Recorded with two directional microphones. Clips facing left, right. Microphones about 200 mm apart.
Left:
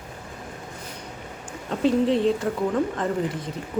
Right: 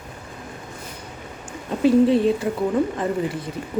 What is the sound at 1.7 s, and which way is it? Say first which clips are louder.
Speech: right 5 dB; 10° right (ahead or behind).